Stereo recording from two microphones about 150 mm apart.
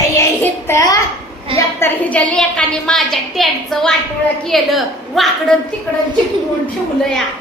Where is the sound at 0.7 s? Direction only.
20° left (ahead or behind).